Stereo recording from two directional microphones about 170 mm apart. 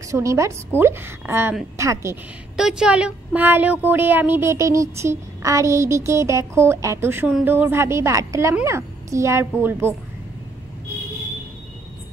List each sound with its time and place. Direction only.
0.1 s speech: 20° right (ahead or behind)
2.5 s speech: 5° right (ahead or behind)